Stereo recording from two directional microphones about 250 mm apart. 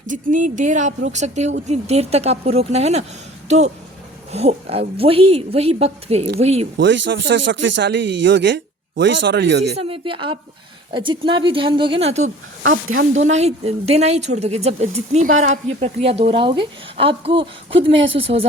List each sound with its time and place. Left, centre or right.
0.1 s speech: right
4.3 s speech: right
6.7 s speech: right
9.7 s speech: right